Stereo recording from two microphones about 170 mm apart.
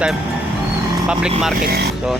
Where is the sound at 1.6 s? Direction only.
65° right (ahead or behind).